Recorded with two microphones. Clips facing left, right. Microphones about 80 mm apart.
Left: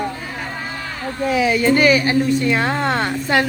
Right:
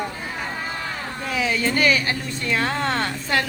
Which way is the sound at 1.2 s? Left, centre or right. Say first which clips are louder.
Left 7 dB; centre.